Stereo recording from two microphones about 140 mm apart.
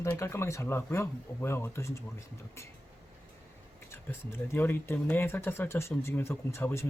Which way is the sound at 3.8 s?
15° left (ahead or behind).